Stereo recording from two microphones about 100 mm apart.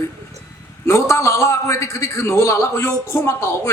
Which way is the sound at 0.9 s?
30° left (ahead or behind).